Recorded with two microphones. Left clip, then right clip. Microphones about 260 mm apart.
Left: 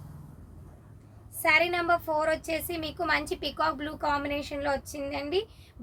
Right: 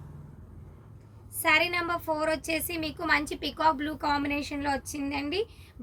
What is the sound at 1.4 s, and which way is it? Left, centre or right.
A woman's voice, centre.